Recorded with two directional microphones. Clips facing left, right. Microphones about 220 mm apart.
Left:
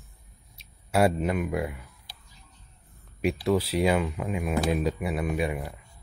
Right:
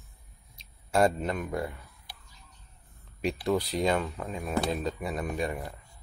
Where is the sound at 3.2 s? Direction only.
5° left (ahead or behind).